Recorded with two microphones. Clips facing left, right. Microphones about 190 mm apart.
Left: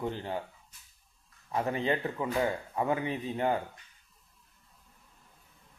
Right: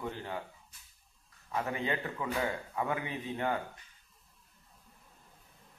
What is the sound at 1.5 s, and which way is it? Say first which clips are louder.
A man's voice: left 4 dB; 30° left (ahead or behind).